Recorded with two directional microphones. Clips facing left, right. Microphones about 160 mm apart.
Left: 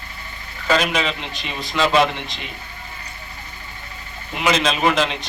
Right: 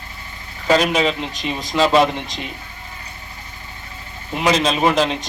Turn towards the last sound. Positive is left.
turn(degrees=-40)  # may be behind; listen again after turning